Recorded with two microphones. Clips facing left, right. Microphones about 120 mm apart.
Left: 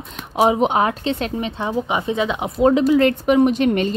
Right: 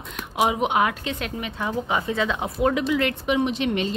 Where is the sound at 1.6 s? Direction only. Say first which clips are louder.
Left 2 dB; 20° left (ahead or behind); by 3.9 s 45° left (ahead or behind).